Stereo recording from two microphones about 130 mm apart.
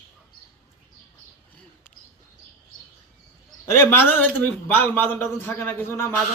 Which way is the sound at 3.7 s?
20° left (ahead or behind).